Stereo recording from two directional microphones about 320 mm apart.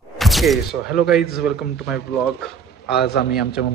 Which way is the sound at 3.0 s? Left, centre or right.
Left.